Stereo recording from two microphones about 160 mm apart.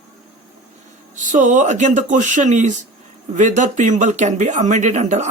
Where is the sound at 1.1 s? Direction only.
55° right (ahead or behind).